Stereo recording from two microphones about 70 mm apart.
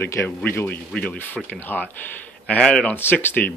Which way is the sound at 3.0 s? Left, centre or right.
Left.